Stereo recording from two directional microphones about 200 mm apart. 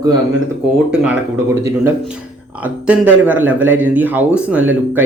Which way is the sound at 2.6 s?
10° right (ahead or behind).